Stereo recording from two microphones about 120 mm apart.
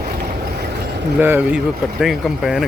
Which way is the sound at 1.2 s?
15° right (ahead or behind).